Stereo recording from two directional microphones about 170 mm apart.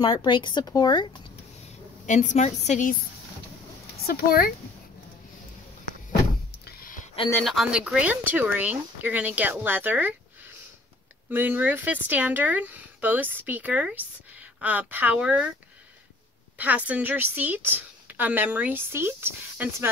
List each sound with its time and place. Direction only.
0.0 s a woman's voice: 25° left (ahead or behind)
2.0 s a woman's voice: 45° left (ahead or behind)
4.0 s speech: 65° left (ahead or behind)
6.6 s a sound: 55° left (ahead or behind)
7.4 s a woman's voice: 5° right (ahead or behind)
11.2 s a woman's voice: 10° right (ahead or behind)
16.5 s a woman's voice: 10° right (ahead or behind)